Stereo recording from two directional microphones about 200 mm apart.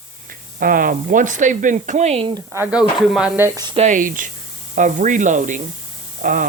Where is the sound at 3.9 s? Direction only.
40° right (ahead or behind).